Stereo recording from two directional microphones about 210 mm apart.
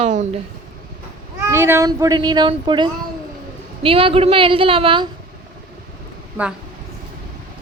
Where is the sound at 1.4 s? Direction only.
10° right (ahead or behind).